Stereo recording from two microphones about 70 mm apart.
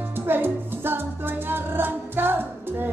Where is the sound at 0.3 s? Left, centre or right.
Right.